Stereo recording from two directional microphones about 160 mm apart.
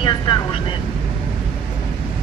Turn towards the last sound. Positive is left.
turn(degrees=30)  # may be behind; listen again after turning